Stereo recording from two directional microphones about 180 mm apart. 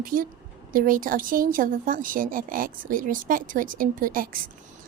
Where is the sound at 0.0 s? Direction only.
50° right (ahead or behind).